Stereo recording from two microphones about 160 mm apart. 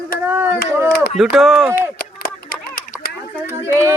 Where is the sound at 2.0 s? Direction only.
60° left (ahead or behind).